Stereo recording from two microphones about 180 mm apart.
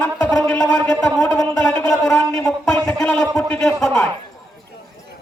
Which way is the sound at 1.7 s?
5° left (ahead or behind).